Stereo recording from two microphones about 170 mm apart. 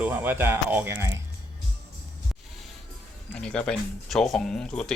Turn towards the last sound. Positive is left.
turn(degrees=5)  # may be behind; listen again after turning